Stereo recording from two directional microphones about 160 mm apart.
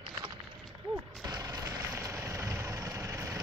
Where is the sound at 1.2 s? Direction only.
25° right (ahead or behind).